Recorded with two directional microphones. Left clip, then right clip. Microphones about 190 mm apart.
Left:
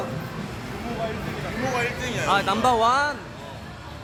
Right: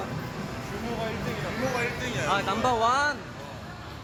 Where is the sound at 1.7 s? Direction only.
25° left (ahead or behind).